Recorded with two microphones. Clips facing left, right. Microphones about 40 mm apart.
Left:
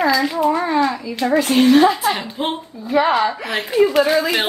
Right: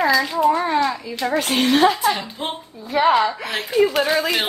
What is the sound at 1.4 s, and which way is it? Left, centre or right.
Speech, right.